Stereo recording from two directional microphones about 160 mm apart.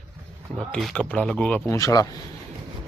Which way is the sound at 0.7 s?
5° left (ahead or behind).